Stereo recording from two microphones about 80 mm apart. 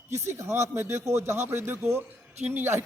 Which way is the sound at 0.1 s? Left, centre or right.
Right.